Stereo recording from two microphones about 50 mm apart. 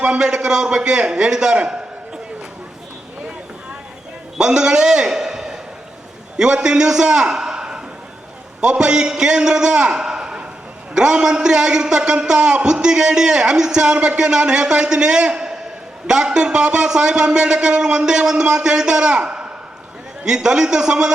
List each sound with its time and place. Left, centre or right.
0.0 s a man's voice: centre
4.4 s a man's voice: centre